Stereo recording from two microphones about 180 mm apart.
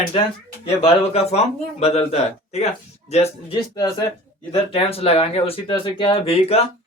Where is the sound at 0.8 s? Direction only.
35° left (ahead or behind).